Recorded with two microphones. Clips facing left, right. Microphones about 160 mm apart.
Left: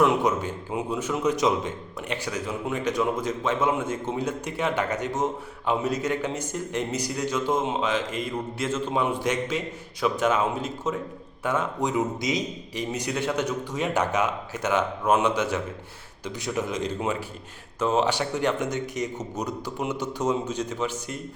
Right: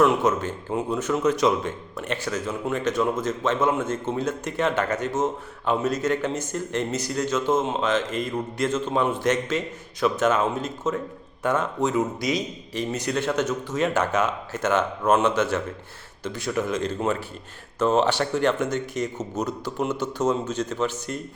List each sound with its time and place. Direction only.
0.0 s a man's voice: 15° left (ahead or behind)